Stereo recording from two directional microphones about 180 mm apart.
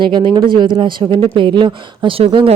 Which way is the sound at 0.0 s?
25° right (ahead or behind).